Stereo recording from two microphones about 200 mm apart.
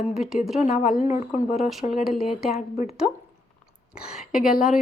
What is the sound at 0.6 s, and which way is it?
Speech, 40° left (ahead or behind).